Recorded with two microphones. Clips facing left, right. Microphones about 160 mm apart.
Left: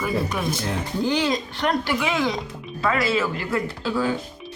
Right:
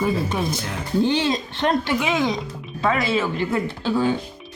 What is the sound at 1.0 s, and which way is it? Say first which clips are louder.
Speech: even; 25° right (ahead or behind).